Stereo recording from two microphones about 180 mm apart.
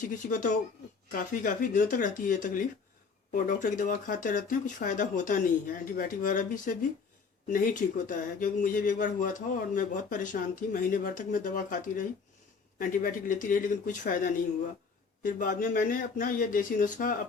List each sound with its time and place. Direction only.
0.0 s speech: 50° left (ahead or behind)